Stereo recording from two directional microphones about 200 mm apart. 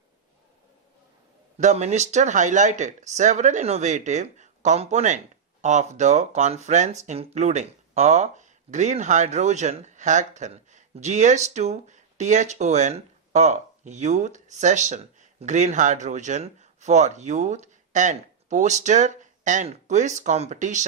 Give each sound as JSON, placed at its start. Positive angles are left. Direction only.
{"t": 1.5, "sound": "speech", "side_deg": -35}